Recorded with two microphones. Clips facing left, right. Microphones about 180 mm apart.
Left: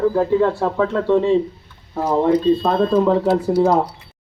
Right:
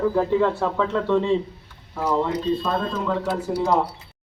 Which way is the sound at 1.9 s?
40° left (ahead or behind).